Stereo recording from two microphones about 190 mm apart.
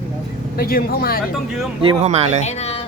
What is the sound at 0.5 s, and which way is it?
Speech, 50° left (ahead or behind).